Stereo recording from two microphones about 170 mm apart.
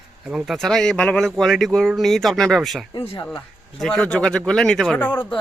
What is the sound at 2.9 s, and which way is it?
Speech, 25° left (ahead or behind).